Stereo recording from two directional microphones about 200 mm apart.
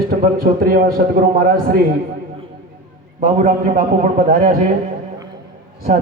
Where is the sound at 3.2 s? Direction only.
40° right (ahead or behind).